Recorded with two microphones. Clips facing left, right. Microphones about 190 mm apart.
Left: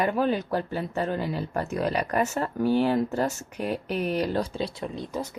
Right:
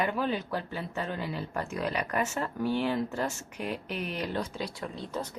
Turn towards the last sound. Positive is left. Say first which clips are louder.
# left 4 dB
turn(degrees=10)  # may be behind; listen again after turning